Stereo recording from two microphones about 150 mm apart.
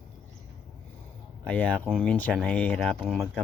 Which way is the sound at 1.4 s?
10° left (ahead or behind).